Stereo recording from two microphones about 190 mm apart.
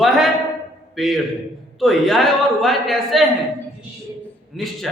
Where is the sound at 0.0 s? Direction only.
Centre (ahead or behind).